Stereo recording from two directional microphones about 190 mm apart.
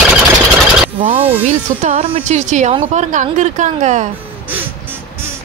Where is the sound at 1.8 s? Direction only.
35° right (ahead or behind).